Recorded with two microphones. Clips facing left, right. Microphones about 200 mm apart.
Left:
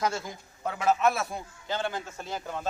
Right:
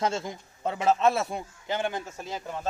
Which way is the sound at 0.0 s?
25° right (ahead or behind).